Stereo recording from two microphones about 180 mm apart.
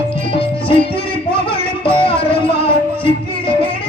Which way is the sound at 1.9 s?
30° left (ahead or behind).